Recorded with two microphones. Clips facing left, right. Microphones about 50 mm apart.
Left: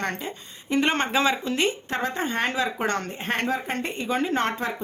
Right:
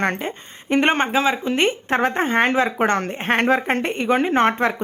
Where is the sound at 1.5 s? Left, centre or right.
Right.